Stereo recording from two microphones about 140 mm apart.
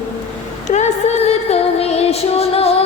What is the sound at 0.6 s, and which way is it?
Music, 55° left (ahead or behind).